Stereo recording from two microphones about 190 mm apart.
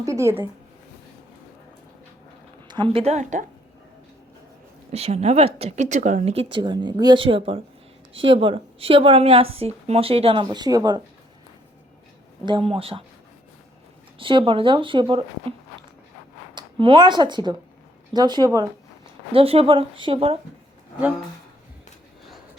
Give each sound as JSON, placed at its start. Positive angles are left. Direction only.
{"t": 0.0, "sound": "speech", "side_deg": -15}
{"t": 2.6, "sound": "a woman's voice", "side_deg": -25}
{"t": 4.9, "sound": "speech", "side_deg": -35}
{"t": 12.5, "sound": "speech", "side_deg": -30}
{"t": 14.2, "sound": "speech", "side_deg": -25}
{"t": 16.6, "sound": "speech", "side_deg": -25}
{"t": 19.3, "sound": "speech", "side_deg": -30}